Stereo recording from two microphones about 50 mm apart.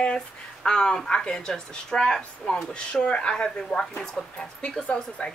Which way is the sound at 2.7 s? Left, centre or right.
Left.